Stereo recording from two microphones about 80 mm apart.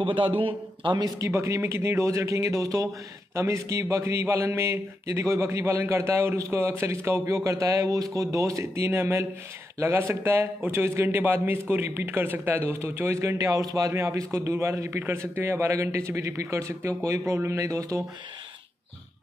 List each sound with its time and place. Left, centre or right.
0.0 s a man's voice: right
1.0 s a man's voice: right